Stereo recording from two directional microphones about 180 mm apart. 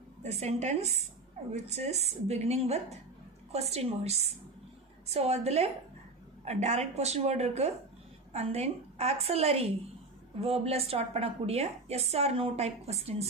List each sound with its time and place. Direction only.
0.2 s a woman's voice: 35° right (ahead or behind)